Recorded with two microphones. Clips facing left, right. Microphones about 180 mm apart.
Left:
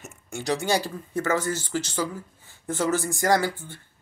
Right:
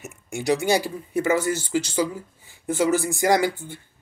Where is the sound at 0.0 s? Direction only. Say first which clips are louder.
Right 5 dB; 10° right (ahead or behind).